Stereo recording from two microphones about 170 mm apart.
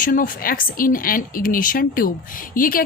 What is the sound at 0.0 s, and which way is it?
A woman's voice, 55° left (ahead or behind).